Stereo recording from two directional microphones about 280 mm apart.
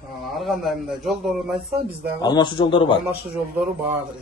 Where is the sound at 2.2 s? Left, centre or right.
Centre.